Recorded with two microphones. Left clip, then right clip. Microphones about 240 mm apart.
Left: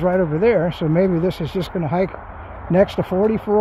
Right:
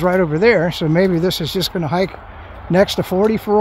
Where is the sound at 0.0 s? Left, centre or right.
Right.